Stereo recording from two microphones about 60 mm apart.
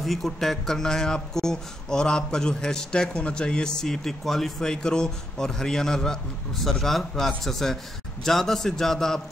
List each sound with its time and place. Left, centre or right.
0.0 s a man's voice: centre